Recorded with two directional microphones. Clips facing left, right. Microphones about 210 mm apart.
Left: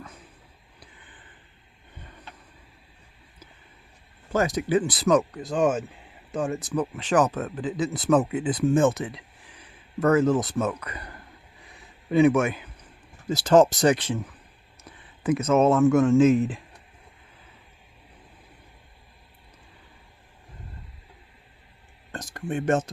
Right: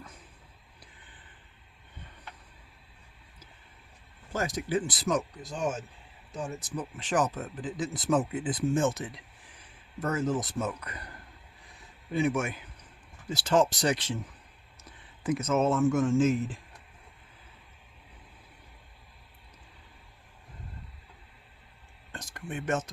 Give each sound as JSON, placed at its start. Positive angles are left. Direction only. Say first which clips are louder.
{"t": 4.3, "sound": "speech", "louder": "left 7 dB", "side_deg": 65}
{"t": 6.5, "sound": "speech", "louder": "left 9 dB", "side_deg": 60}
{"t": 12.1, "sound": "speech", "louder": "left 9 dB", "side_deg": 70}
{"t": 13.2, "sound": "speech", "louder": "left 8 dB", "side_deg": 40}
{"t": 22.3, "sound": "speech", "louder": "left 7 dB", "side_deg": 35}